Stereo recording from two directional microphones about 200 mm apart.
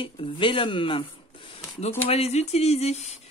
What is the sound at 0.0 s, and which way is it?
Speech, 25° left (ahead or behind).